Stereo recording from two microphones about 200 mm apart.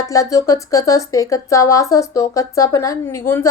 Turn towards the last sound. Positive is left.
turn(degrees=10)  # may be behind; listen again after turning